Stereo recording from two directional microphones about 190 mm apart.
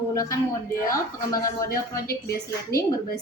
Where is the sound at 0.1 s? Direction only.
15° left (ahead or behind).